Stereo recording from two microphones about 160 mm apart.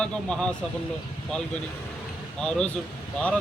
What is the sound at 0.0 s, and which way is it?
Speech, 5° left (ahead or behind).